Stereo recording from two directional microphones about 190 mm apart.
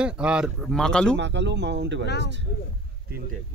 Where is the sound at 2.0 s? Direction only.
60° left (ahead or behind).